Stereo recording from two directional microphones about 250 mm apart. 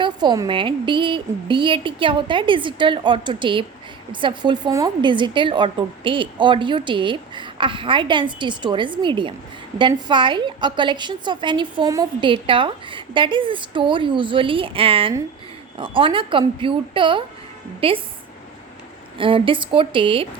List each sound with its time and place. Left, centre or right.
0.0 s a woman's voice: centre
19.2 s a woman's voice: centre